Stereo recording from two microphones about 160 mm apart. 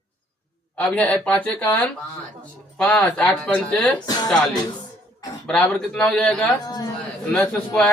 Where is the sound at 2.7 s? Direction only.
5° left (ahead or behind).